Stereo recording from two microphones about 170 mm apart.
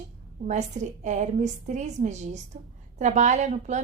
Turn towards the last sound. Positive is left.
turn(degrees=-45)  # may be behind; listen again after turning